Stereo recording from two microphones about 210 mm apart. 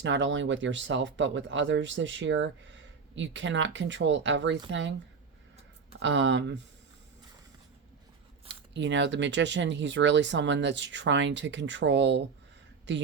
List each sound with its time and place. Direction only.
0.0 s speech: 60° right (ahead or behind)
6.0 s speech: 60° right (ahead or behind)
8.7 s speech: 60° right (ahead or behind)